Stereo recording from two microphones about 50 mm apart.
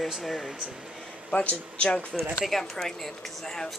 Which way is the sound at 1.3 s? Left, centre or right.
Left.